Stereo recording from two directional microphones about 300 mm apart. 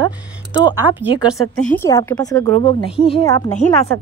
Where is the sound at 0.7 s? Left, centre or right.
Centre.